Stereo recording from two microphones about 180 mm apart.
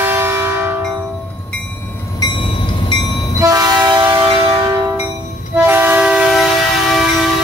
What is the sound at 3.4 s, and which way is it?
Train, 20° right (ahead or behind).